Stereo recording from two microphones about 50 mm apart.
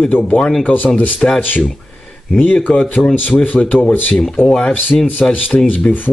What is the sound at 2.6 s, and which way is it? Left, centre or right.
Speech, left.